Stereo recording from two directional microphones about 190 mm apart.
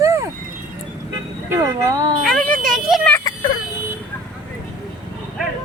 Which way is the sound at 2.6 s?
45° right (ahead or behind).